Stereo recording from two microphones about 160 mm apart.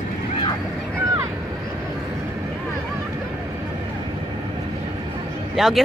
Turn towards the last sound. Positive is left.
turn(degrees=0)  # may be behind; listen again after turning